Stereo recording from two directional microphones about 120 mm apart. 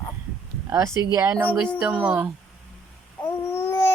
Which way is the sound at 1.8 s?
10° right (ahead or behind).